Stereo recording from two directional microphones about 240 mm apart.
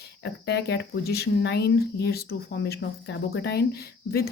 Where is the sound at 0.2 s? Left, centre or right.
Left.